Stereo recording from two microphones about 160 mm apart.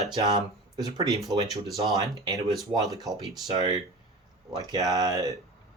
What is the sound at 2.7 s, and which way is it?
Speech, 25° right (ahead or behind).